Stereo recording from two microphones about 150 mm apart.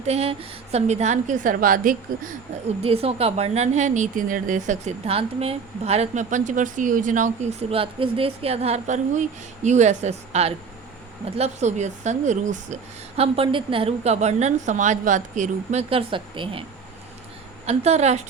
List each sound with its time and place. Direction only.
0.0 s a woman's voice: 45° right (ahead or behind); by 2.3 s 65° right (ahead or behind)
2.8 s a woman's voice: 40° right (ahead or behind); by 7.3 s 60° right (ahead or behind)
7.7 s a woman's voice: 35° right (ahead or behind)
17.7 s a woman's voice: 45° right (ahead or behind)